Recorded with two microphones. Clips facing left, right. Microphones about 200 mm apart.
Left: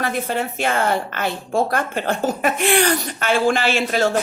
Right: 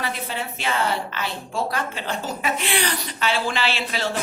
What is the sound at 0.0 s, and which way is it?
A woman's voice, 50° left (ahead or behind).